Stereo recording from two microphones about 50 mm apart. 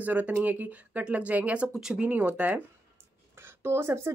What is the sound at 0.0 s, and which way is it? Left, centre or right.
Speech, right.